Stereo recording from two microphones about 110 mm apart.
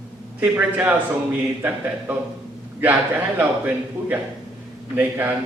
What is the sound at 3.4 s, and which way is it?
A man's voice, 15° right (ahead or behind).